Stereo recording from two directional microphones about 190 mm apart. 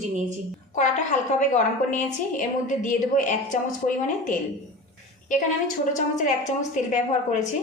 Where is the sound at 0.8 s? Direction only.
40° left (ahead or behind).